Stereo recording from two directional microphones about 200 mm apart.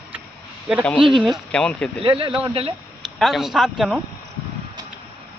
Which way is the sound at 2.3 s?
5° right (ahead or behind).